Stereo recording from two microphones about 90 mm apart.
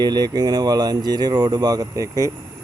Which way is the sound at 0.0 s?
50° right (ahead or behind).